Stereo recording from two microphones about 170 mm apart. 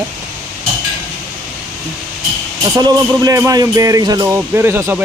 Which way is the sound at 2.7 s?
20° right (ahead or behind).